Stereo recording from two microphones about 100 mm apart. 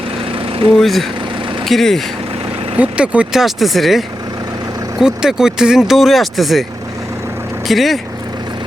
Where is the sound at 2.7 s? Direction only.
15° right (ahead or behind).